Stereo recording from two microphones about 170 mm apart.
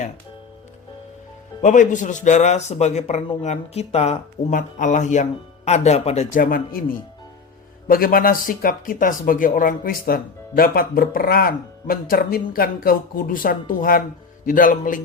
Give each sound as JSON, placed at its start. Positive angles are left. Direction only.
{"t": 1.6, "sound": "speech", "side_deg": 50}
{"t": 4.5, "sound": "speech", "side_deg": 50}
{"t": 6.4, "sound": "speech", "side_deg": 60}
{"t": 7.9, "sound": "speech", "side_deg": 60}